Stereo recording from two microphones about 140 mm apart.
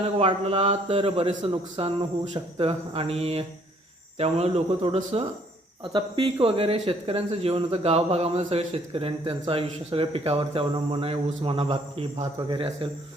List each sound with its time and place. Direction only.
0.2 s a man's voice: 45° right (ahead or behind)